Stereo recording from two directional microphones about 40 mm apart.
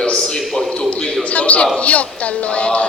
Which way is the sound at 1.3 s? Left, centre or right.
Left.